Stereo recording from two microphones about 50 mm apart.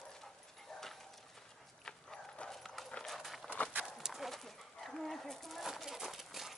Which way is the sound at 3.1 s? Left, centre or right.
Centre.